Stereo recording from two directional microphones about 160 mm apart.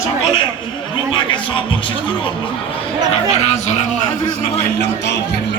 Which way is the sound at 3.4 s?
45° left (ahead or behind).